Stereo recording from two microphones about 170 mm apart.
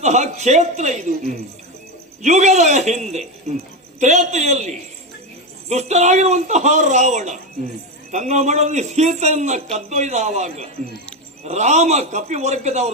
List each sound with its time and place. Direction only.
0.0 s a man's voice: 40° right (ahead or behind)